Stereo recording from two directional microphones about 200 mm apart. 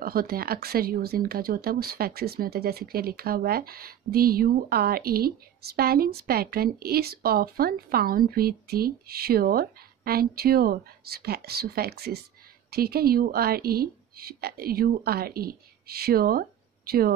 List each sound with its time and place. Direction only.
0.0 s speech: 50° right (ahead or behind)